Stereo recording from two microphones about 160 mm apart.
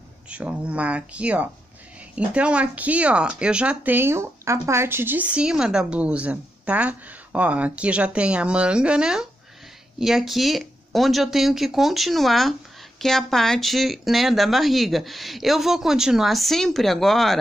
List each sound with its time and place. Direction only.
0.3 s speech: 5° right (ahead or behind)